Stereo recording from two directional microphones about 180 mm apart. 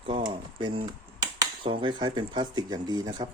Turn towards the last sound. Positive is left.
turn(degrees=-20)  # may be behind; listen again after turning